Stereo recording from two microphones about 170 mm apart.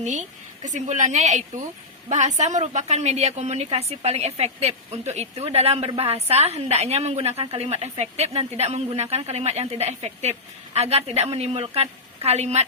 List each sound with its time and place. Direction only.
0.0 s a woman's voice: 45° right (ahead or behind)